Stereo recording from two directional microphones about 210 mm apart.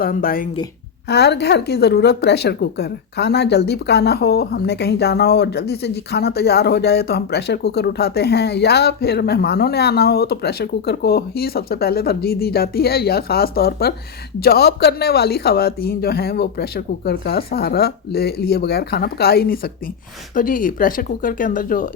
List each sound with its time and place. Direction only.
0.0 s a woman's voice: 45° left (ahead or behind)